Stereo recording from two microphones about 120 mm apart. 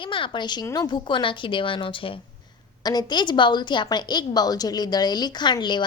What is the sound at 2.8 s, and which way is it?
A woman's voice, 35° left (ahead or behind).